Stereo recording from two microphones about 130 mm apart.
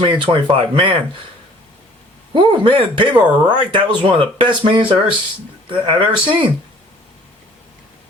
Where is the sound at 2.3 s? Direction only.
40° right (ahead or behind).